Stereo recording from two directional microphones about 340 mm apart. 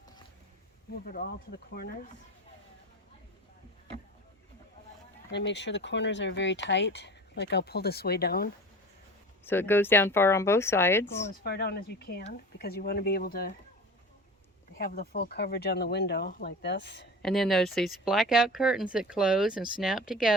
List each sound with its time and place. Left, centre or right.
1.0 s speech: left
5.3 s speech: left
9.4 s speech: centre
11.4 s speech: left
14.8 s speech: left
17.2 s speech: centre